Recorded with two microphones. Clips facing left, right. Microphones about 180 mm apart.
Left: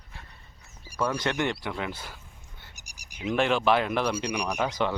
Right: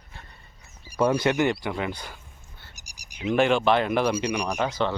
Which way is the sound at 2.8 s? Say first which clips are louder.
Even; 55° left (ahead or behind).